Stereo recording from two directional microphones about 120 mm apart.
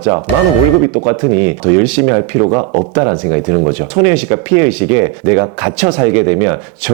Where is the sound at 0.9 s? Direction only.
25° right (ahead or behind).